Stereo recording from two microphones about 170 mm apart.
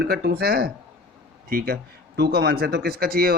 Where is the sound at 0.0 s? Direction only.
70° right (ahead or behind).